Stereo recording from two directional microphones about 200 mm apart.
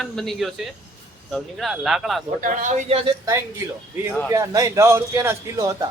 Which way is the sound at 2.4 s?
40° right (ahead or behind).